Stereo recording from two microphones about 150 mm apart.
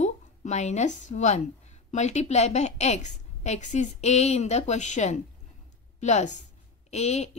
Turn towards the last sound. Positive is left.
turn(degrees=45)  # may be behind; listen again after turning